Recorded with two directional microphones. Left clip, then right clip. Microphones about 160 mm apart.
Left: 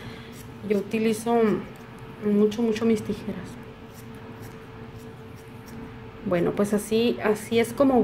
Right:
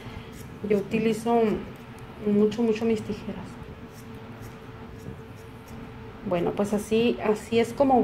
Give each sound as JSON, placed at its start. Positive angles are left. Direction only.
{"t": 0.7, "sound": "speech", "side_deg": 25}
{"t": 6.3, "sound": "speech", "side_deg": 25}